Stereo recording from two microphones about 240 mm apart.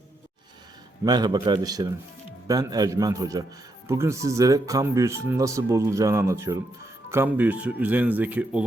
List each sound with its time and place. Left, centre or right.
1.0 s speech: centre